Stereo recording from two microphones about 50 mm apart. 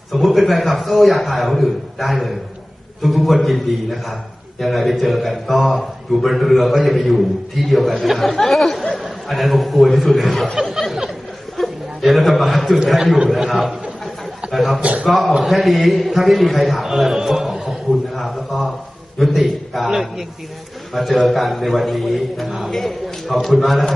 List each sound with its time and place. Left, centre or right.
0.1 s a man's voice: centre
14.8 s a man's voice: right
15.0 s a man's voice: centre